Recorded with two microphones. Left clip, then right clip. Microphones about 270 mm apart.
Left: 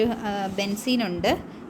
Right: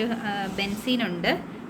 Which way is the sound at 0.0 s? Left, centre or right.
Left.